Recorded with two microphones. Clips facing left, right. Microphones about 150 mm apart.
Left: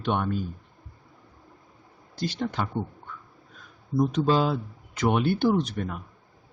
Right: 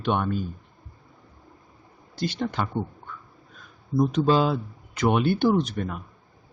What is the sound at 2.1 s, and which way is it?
Speech, 65° right (ahead or behind).